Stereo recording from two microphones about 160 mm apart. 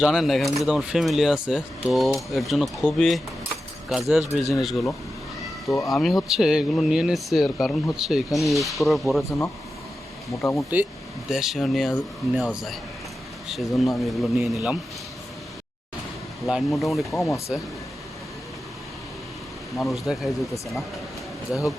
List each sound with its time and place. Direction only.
0.0 s speech: centre (ahead or behind)
5.9 s speech: centre (ahead or behind)
10.4 s speech: centre (ahead or behind)
16.5 s speech: centre (ahead or behind)
17.2 s speech: 20° left (ahead or behind)
19.7 s speech: centre (ahead or behind)